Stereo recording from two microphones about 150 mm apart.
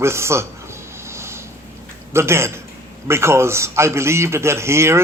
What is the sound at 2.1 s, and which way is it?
Speech, 15° right (ahead or behind).